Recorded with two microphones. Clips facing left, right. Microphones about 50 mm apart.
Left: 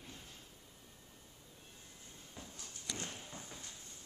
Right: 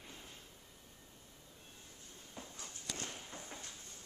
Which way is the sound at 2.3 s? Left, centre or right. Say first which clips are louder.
Right 2 dB; centre.